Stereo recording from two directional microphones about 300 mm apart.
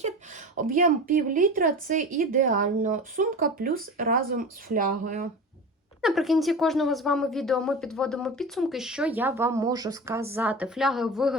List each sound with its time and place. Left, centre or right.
0.5 s speech: right
6.0 s speech: centre